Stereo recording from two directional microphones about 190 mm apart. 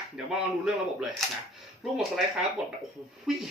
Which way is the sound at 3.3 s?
Centre (ahead or behind).